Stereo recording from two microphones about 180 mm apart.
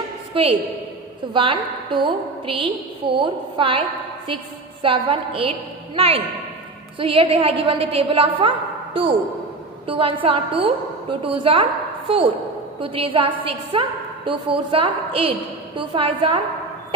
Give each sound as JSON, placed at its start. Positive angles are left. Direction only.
{"t": 0.3, "sound": "a woman's voice", "side_deg": -30}
{"t": 4.8, "sound": "a woman's voice", "side_deg": -30}